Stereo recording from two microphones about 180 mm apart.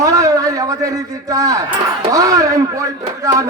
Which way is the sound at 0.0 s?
20° right (ahead or behind).